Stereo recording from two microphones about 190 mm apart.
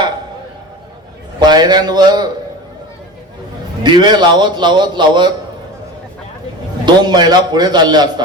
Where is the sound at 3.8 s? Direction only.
25° right (ahead or behind).